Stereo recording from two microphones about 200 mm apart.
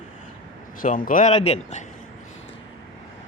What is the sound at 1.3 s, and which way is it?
Speech, 30° left (ahead or behind).